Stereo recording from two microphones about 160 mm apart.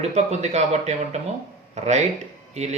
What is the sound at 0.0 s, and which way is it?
Speech, 45° right (ahead or behind).